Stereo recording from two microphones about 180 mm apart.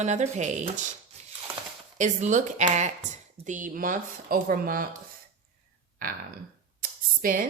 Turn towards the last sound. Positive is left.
turn(degrees=-50)  # may be behind; listen again after turning